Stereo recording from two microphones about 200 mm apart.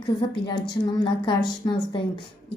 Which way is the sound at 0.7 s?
20° left (ahead or behind).